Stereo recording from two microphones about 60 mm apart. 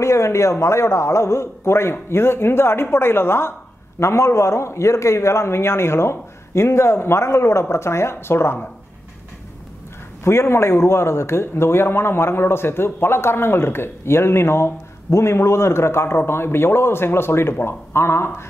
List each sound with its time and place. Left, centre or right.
0.0 s speech: left
4.0 s speech: left
10.2 s speech: left